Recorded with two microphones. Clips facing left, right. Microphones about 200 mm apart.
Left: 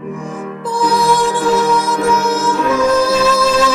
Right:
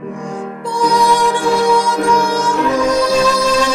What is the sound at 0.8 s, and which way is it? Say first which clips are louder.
Music: right 1 dB; 15° right (ahead or behind).